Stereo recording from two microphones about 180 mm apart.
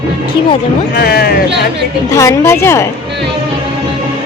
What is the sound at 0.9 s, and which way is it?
Speech, 60° left (ahead or behind).